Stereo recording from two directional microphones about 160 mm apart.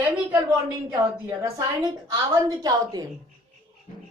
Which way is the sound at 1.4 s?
25° right (ahead or behind).